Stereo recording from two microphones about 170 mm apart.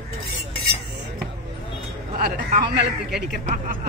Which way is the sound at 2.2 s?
65° right (ahead or behind).